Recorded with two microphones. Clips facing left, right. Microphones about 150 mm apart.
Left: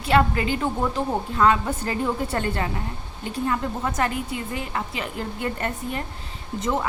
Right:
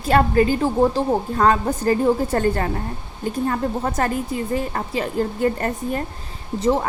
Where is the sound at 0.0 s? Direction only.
40° right (ahead or behind).